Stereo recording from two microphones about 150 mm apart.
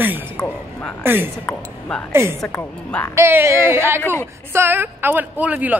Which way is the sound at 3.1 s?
15° right (ahead or behind).